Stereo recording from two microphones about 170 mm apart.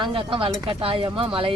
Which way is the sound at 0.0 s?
30° right (ahead or behind).